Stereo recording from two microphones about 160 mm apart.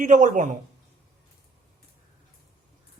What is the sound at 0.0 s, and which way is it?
Speech, 50° right (ahead or behind).